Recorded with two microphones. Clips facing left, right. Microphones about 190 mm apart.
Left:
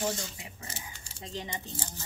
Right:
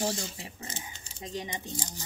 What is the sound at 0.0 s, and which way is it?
Speech, 25° right (ahead or behind).